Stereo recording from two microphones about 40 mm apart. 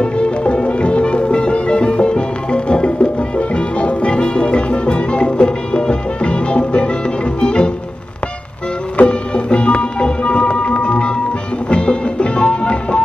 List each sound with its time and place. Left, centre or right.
0.0 s music: left
8.9 s music: left